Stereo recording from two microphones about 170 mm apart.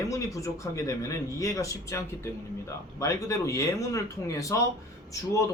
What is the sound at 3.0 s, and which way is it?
A man's voice, 20° left (ahead or behind).